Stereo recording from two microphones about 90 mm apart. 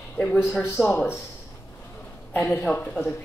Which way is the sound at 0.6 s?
20° left (ahead or behind).